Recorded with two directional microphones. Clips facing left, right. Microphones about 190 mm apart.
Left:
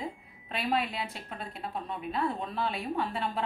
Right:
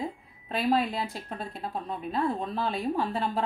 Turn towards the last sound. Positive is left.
turn(degrees=-40)  # may be behind; listen again after turning